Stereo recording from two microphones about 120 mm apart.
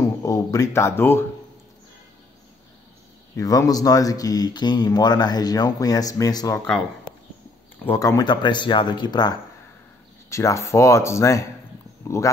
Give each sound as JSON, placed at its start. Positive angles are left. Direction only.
{"t": 0.0, "sound": "a sound", "side_deg": 25}
{"t": 3.3, "sound": "speech", "side_deg": 30}
{"t": 7.8, "sound": "speech", "side_deg": 20}
{"t": 10.3, "sound": "speech", "side_deg": 25}